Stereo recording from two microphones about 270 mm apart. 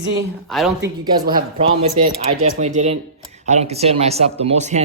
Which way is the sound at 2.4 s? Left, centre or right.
Right.